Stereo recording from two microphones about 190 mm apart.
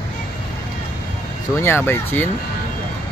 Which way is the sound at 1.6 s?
10° left (ahead or behind).